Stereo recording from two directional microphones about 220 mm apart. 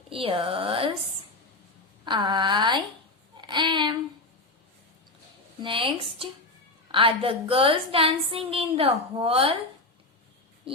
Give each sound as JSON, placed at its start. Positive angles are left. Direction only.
{"t": 0.1, "sound": "a woman's voice", "side_deg": -25}
{"t": 2.0, "sound": "a woman's voice", "side_deg": -20}
{"t": 5.6, "sound": "a woman's voice", "side_deg": -25}